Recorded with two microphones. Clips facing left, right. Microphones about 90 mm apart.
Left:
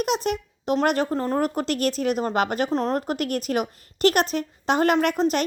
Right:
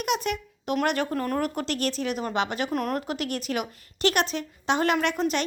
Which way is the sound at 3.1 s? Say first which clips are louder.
Left 4 dB; 45° left (ahead or behind).